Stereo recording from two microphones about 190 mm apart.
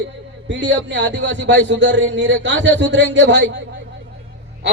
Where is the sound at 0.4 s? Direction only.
70° right (ahead or behind).